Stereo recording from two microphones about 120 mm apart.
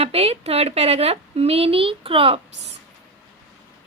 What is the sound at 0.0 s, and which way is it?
Speech, 60° right (ahead or behind).